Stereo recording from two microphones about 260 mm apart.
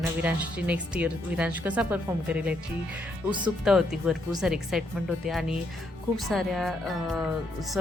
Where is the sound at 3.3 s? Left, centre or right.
Centre.